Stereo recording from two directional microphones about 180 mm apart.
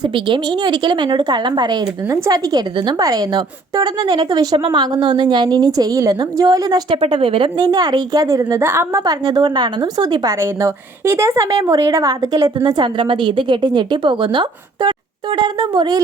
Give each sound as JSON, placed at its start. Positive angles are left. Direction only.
{"t": 0.0, "sound": "a woman's voice", "side_deg": -25}